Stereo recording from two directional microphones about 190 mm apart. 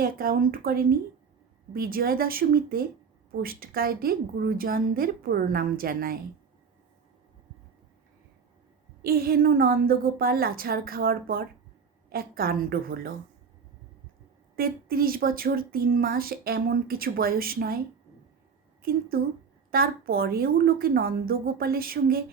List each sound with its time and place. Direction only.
0.0 s speech: 50° right (ahead or behind)
9.0 s speech: 50° right (ahead or behind)
14.5 s speech: 50° right (ahead or behind)
18.8 s a woman's voice: 50° right (ahead or behind)